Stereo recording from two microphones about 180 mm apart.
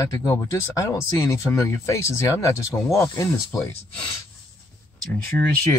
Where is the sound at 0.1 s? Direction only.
15° left (ahead or behind).